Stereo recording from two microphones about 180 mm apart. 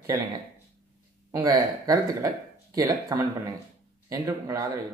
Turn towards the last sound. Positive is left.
turn(degrees=-15)  # may be behind; listen again after turning